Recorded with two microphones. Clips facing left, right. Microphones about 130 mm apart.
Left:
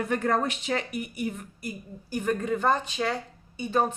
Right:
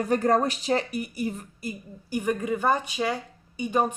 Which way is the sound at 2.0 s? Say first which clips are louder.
Right 1 dB; 10° right (ahead or behind).